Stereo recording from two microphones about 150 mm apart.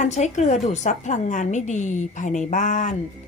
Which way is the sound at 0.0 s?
50° left (ahead or behind).